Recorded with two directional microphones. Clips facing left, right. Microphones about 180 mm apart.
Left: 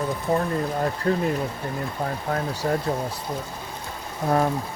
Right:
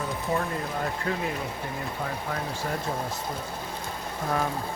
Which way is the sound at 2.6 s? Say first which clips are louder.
Left 9 dB; 35° left (ahead or behind).